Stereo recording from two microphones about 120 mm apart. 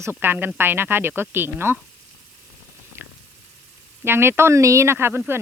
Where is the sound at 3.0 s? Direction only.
20° right (ahead or behind).